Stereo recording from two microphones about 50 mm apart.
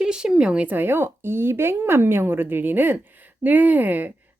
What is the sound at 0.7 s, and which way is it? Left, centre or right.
Speech, right.